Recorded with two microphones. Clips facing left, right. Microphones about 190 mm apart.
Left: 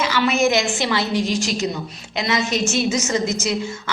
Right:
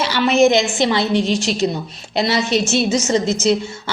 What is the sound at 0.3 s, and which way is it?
Speech, centre (ahead or behind).